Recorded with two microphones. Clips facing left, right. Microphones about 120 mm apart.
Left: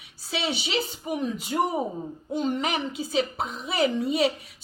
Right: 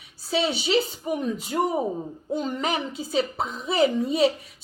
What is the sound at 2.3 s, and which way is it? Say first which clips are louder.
A woman's voice: even; 40° right (ahead or behind).